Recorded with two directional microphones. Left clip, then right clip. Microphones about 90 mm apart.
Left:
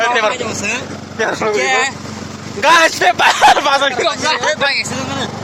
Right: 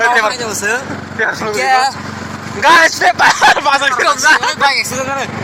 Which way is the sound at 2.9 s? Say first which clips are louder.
Right 1 dB; 50° left (ahead or behind).